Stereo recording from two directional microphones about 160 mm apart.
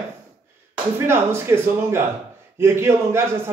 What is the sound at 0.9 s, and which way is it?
Speech, 15° right (ahead or behind).